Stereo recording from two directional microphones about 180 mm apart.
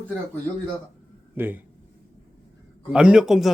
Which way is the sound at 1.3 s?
10° right (ahead or behind).